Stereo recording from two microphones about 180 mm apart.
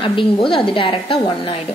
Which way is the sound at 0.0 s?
30° left (ahead or behind).